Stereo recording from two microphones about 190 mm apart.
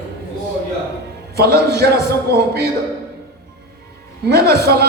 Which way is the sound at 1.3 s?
55° right (ahead or behind).